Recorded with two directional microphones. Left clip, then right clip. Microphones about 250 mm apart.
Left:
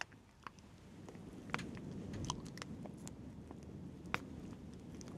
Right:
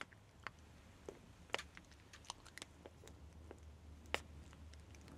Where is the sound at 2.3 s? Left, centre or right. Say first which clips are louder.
Left 7 dB; left.